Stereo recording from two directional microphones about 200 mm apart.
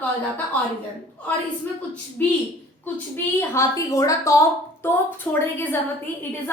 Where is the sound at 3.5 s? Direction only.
15° left (ahead or behind).